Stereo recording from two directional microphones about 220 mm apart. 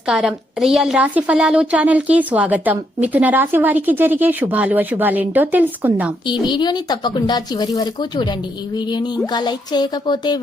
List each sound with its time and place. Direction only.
0.1 s a woman's voice: 5° right (ahead or behind)
6.2 s speech: 20° left (ahead or behind)